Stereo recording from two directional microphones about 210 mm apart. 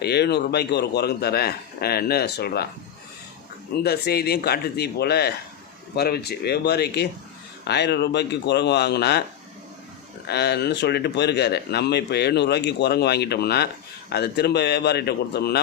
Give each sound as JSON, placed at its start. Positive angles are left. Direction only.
{"t": 0.0, "sound": "speech", "side_deg": 50}
{"t": 3.8, "sound": "speech", "side_deg": 50}
{"t": 10.2, "sound": "speech", "side_deg": 50}